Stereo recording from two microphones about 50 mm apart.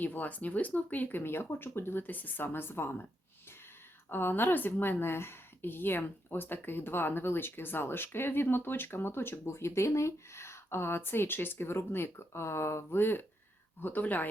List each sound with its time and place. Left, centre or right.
0.0 s speech: left
1.2 s a woman's voice: left
4.1 s a woman's voice: left
13.8 s speech: left